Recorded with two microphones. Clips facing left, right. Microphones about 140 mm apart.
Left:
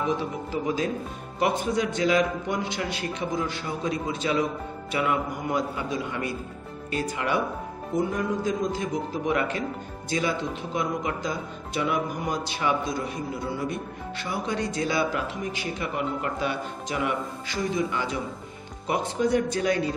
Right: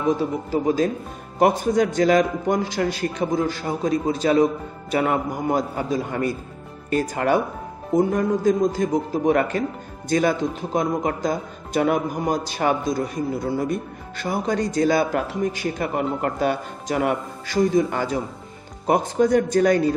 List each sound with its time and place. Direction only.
0.2 s a man's voice: 40° right (ahead or behind)